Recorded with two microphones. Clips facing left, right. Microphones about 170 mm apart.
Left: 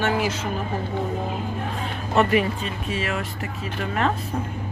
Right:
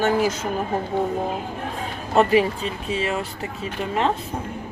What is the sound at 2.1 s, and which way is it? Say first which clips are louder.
Speech: right 3 dB; 30° right (ahead or behind).